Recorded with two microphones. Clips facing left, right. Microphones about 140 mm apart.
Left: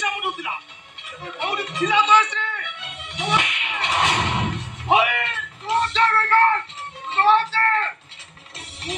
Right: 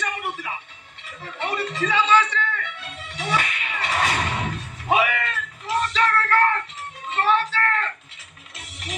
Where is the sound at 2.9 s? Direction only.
20° left (ahead or behind).